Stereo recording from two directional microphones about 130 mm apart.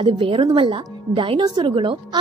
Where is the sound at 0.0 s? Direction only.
40° right (ahead or behind).